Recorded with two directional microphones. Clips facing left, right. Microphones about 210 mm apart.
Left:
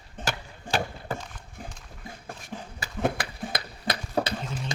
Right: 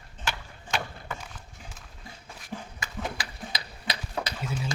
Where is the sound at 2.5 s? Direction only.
10° right (ahead or behind).